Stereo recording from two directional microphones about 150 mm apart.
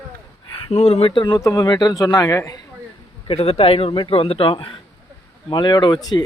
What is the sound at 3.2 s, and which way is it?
A man's voice, 40° left (ahead or behind).